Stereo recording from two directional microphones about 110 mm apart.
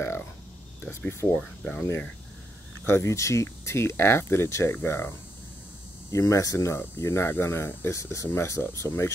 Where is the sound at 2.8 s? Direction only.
25° left (ahead or behind).